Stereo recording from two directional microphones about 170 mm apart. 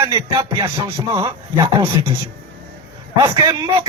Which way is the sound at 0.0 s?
25° right (ahead or behind).